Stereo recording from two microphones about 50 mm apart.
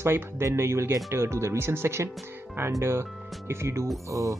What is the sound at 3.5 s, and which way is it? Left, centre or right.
Speech, right.